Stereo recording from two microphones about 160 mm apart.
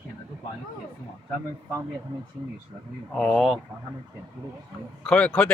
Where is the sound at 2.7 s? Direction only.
20° right (ahead or behind).